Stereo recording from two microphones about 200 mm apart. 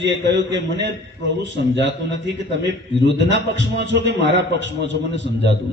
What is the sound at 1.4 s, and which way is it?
A man's voice, 65° right (ahead or behind).